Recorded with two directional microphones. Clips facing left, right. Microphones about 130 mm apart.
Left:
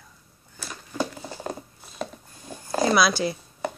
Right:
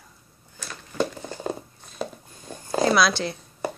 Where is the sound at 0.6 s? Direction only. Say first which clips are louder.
Right 2 dB; 10° left (ahead or behind).